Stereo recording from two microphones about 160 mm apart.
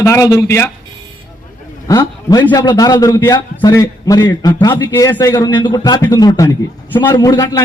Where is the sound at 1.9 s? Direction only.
25° left (ahead or behind).